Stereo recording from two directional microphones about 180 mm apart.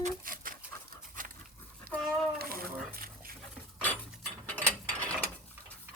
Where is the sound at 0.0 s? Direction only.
50° right (ahead or behind).